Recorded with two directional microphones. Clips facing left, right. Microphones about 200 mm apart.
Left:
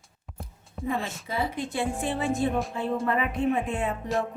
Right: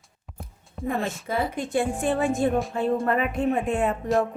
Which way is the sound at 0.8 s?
55° right (ahead or behind).